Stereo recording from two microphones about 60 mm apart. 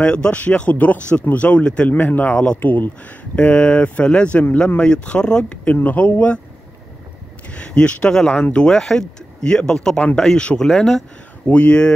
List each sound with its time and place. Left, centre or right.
0.0 s speech: centre
1.9 s speech: left
2.3 s speech: centre
2.6 s speech: left; by 5.4 s centre
5.8 s speech: left
7.4 s speech: centre
8.2 s speech: centre
11.4 s speech: left